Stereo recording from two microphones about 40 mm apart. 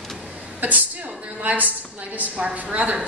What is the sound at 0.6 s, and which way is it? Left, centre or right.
A woman's voice, right.